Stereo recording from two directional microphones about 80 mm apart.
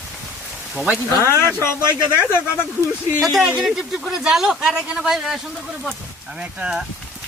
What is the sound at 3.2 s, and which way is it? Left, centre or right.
Speech, centre.